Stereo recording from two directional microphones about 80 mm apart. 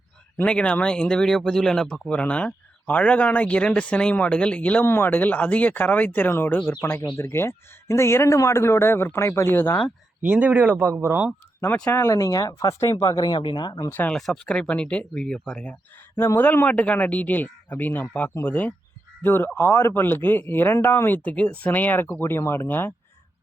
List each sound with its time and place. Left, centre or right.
0.4 s speech: centre
7.2 s speech: left
10.2 s speech: centre
11.9 s speech: left
13.6 s speech: left
14.1 s speech: centre
16.1 s speech: left